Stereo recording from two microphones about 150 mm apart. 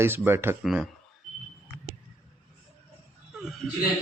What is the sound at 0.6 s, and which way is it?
Speech, 5° right (ahead or behind).